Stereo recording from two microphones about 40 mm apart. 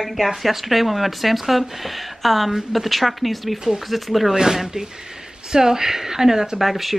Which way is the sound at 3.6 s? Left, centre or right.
Centre.